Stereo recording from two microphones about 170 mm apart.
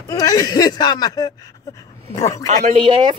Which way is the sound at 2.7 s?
30° right (ahead or behind).